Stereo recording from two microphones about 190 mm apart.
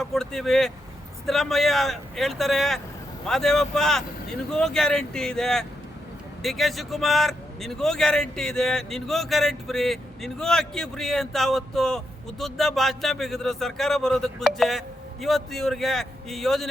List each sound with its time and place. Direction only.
0.0 s a man's voice: centre (ahead or behind)